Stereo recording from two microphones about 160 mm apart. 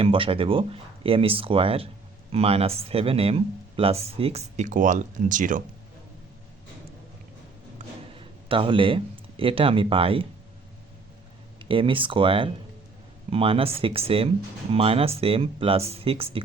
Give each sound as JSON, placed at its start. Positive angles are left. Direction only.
{"t": 0.0, "sound": "speech", "side_deg": -35}
{"t": 8.1, "sound": "a sound", "side_deg": -35}
{"t": 9.4, "sound": "speech", "side_deg": -35}
{"t": 11.6, "sound": "speech", "side_deg": -35}